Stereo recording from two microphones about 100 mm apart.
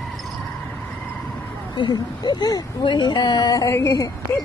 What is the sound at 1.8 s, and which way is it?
Speech, 45° left (ahead or behind).